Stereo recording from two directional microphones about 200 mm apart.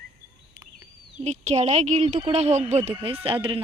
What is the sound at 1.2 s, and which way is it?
A woman's voice, 35° right (ahead or behind).